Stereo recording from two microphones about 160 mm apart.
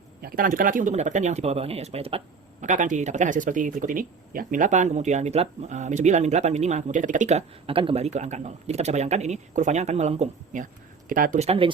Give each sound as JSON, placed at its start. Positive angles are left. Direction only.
{"t": 0.2, "sound": "speech", "side_deg": -65}
{"t": 11.1, "sound": "speech", "side_deg": -60}
{"t": 11.3, "sound": "speech", "side_deg": -35}